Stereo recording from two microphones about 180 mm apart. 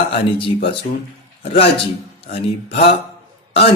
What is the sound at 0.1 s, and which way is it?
Speech, 30° left (ahead or behind).